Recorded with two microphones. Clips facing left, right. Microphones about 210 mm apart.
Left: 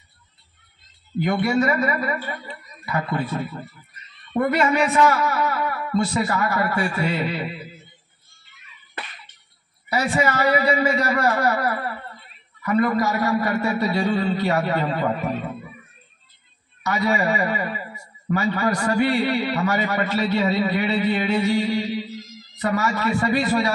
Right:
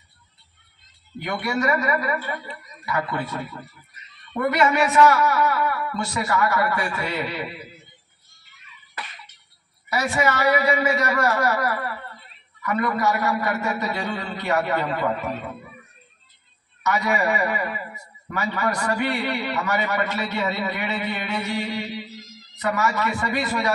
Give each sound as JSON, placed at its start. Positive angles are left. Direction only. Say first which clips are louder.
{"t": 1.2, "sound": "speech", "louder": "left 4 dB", "side_deg": 35}
{"t": 9.8, "sound": "a man's voice", "louder": "left 1 dB", "side_deg": 35}
{"t": 16.8, "sound": "speech", "louder": "left 1 dB", "side_deg": 35}
{"t": 22.6, "sound": "speech", "louder": "left 1 dB", "side_deg": 35}